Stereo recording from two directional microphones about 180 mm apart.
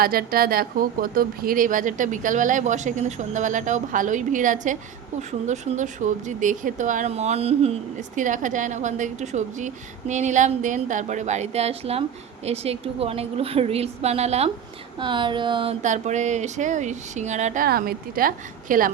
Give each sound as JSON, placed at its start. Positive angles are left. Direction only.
{"t": 0.0, "sound": "a woman's voice", "side_deg": -55}
{"t": 14.9, "sound": "a sound", "side_deg": -25}
{"t": 15.8, "sound": "speech", "side_deg": -40}